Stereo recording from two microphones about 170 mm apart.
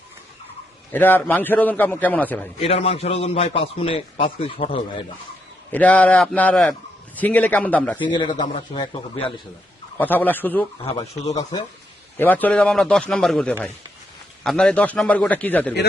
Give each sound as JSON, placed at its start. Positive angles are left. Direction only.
{"t": 0.9, "sound": "a man's voice", "side_deg": 10}
{"t": 2.6, "sound": "a man's voice", "side_deg": 35}
{"t": 5.7, "sound": "a man's voice", "side_deg": 10}
{"t": 7.9, "sound": "speech", "side_deg": 25}
{"t": 10.0, "sound": "a man's voice", "side_deg": 10}
{"t": 10.8, "sound": "a man's voice", "side_deg": 35}
{"t": 11.3, "sound": "speech", "side_deg": 20}
{"t": 12.1, "sound": "a man's voice", "side_deg": 10}